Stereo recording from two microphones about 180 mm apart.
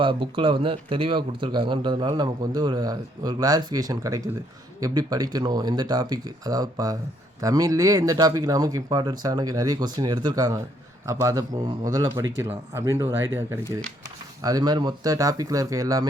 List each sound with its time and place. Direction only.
0.0 s speech: 30° right (ahead or behind)
14.4 s speech: 20° right (ahead or behind)